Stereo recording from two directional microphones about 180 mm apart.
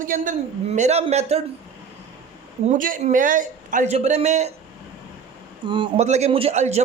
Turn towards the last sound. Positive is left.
turn(degrees=-35)  # may be behind; listen again after turning